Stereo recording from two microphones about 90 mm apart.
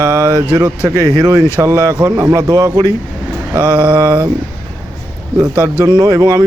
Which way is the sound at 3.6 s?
55° right (ahead or behind).